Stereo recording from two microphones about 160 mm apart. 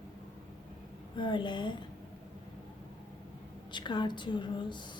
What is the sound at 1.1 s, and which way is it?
Speech, 30° left (ahead or behind).